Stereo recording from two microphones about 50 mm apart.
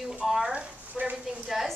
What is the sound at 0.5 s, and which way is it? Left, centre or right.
Speech, right.